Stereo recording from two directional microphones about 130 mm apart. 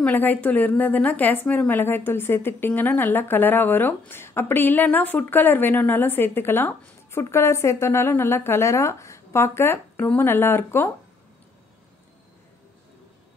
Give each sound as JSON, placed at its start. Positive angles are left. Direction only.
{"t": 0.0, "sound": "a woman's voice", "side_deg": 15}